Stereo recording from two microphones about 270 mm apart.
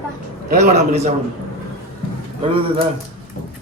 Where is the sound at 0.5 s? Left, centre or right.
Right.